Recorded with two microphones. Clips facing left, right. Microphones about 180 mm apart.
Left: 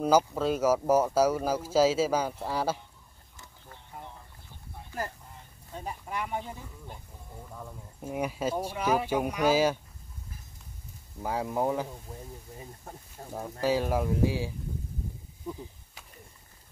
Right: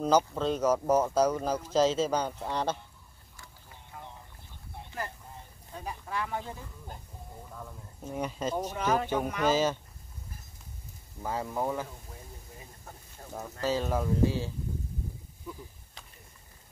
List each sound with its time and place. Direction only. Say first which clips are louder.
0.0 s speech: left 2 dB; 10° left (ahead or behind)
5.8 s speech: even; 20° left (ahead or behind)
7.5 s speech: left 3 dB; 10° left (ahead or behind)
11.2 s speech: left 3 dB; 15° left (ahead or behind)
13.3 s speech: left 3 dB; 10° left (ahead or behind)